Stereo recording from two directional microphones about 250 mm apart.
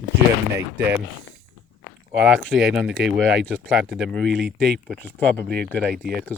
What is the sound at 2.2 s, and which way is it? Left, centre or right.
Speech, centre.